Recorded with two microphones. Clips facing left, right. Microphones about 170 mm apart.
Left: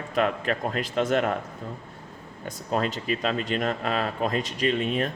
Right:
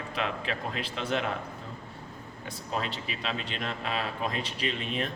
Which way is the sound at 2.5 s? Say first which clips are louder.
Left 7 dB; 45° left (ahead or behind).